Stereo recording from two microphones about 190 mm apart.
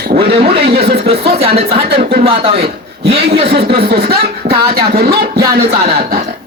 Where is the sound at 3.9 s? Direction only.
55° right (ahead or behind).